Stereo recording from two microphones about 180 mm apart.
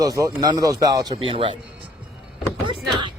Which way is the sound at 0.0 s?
20° right (ahead or behind).